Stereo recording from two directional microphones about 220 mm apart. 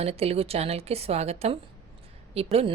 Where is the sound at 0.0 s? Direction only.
30° right (ahead or behind).